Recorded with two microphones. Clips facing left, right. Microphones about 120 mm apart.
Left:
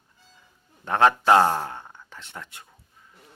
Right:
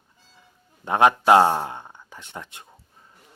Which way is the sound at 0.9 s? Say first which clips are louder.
Right 2 dB; 15° right (ahead or behind).